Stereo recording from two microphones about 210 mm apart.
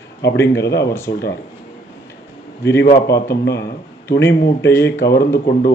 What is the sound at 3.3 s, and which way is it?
Speech, 50° left (ahead or behind).